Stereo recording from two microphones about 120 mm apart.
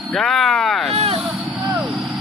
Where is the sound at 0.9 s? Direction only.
60° right (ahead or behind).